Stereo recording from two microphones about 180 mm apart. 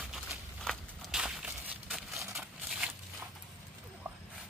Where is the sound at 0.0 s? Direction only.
Centre (ahead or behind).